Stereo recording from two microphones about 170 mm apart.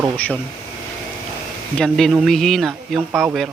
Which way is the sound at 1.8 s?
5° left (ahead or behind).